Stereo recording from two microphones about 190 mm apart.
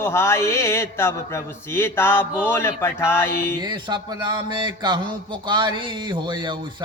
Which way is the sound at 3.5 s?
20° right (ahead or behind).